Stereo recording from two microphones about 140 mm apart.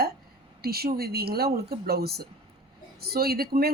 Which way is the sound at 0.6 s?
90° right.